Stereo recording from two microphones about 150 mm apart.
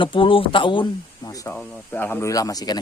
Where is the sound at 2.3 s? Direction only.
25° left (ahead or behind).